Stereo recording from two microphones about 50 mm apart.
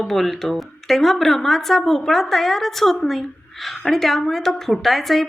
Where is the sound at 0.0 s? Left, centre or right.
Centre.